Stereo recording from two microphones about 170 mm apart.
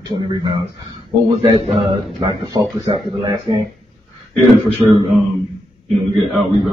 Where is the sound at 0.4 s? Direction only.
30° right (ahead or behind).